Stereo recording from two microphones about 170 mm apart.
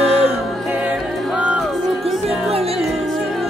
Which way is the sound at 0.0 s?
35° right (ahead or behind).